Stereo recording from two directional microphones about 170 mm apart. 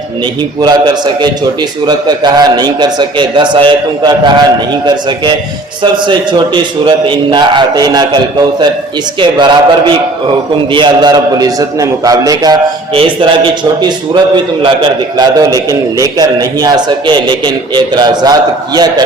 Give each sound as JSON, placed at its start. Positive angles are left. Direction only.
{"t": 0.6, "sound": "a man's voice", "side_deg": -25}
{"t": 14.6, "sound": "a man's voice", "side_deg": -25}